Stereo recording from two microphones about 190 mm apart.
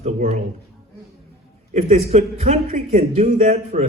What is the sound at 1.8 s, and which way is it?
A man's voice, 35° right (ahead or behind).